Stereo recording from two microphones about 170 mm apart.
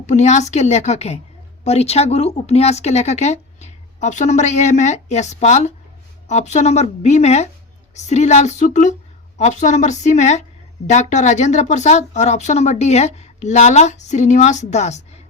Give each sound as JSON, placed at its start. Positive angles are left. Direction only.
{"t": 0.0, "sound": "speech", "side_deg": 45}